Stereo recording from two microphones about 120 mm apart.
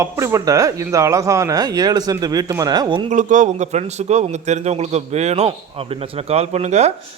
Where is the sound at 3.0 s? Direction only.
90° right; by 6.9 s 65° right (ahead or behind).